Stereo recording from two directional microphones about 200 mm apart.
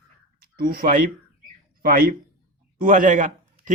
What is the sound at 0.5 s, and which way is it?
Speech, 45° right (ahead or behind).